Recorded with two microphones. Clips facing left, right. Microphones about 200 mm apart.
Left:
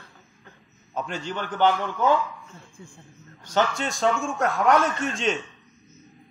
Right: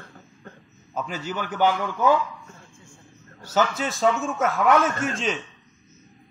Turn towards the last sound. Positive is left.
turn(degrees=0)  # may be behind; listen again after turning